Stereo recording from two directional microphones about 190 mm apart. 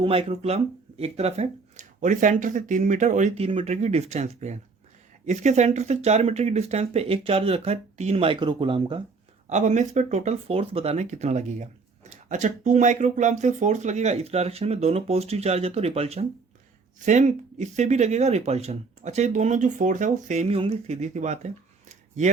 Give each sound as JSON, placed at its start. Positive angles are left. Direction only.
{"t": 0.0, "sound": "speech", "side_deg": -30}
{"t": 9.5, "sound": "speech", "side_deg": -40}